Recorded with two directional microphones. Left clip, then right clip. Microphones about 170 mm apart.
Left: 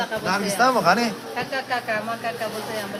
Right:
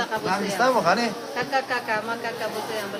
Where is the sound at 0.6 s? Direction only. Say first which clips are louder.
Left 2 dB; 25° left (ahead or behind).